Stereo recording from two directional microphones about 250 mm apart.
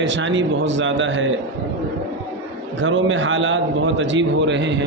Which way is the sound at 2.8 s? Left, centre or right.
Right.